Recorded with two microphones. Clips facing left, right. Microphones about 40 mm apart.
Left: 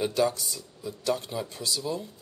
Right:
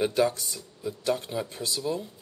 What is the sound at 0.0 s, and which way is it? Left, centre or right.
Speech, centre.